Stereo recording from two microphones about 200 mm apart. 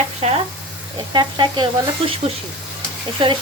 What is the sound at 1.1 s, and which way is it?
Speech, 20° right (ahead or behind).